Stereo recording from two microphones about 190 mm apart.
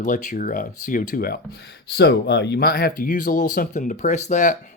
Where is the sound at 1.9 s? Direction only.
60° left (ahead or behind); by 4.6 s 40° left (ahead or behind).